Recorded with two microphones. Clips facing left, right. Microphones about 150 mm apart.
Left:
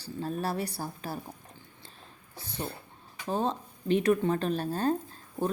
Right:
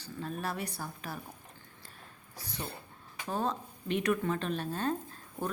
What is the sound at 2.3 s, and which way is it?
A woman's voice, 30° left (ahead or behind).